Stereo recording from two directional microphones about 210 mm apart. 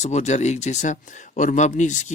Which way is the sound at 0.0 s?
35° left (ahead or behind).